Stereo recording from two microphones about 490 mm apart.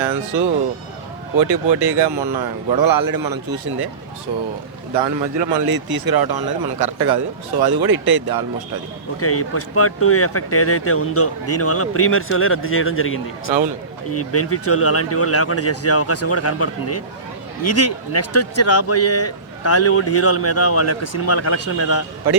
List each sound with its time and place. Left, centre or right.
0.0 s speech: centre
1.4 s a man's voice: right
5.4 s a man's voice: right
9.2 s speech: left